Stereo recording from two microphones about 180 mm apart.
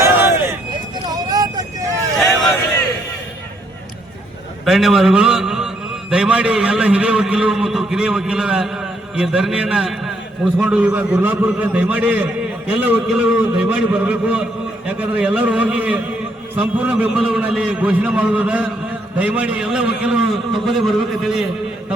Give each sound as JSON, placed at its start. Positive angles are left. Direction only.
{"t": 0.0, "sound": "vehicle", "side_deg": -10}
{"t": 4.6, "sound": "a man's voice", "side_deg": 0}